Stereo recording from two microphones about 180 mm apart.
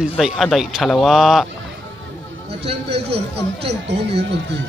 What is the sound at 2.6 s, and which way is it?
A man's voice, 30° right (ahead or behind).